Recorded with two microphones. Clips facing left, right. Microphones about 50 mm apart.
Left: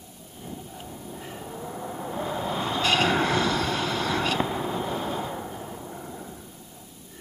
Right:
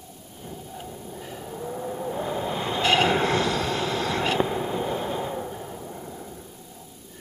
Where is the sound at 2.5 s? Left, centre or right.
Right.